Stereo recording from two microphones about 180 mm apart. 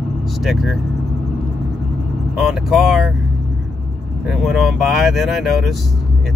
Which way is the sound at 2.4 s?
Centre (ahead or behind).